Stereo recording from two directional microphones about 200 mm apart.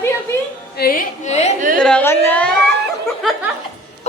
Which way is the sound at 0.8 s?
45° left (ahead or behind).